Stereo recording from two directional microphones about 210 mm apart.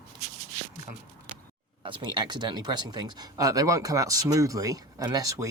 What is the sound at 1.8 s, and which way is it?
Speech, 20° right (ahead or behind).